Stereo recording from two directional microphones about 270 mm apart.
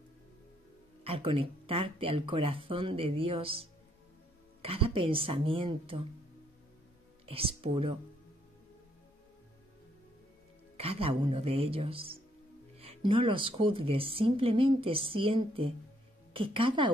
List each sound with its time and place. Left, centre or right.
1.0 s speech: right
7.2 s speech: right
10.8 s speech: right